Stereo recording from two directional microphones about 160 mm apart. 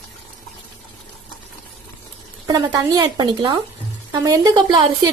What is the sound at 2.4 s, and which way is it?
Speech, 25° right (ahead or behind).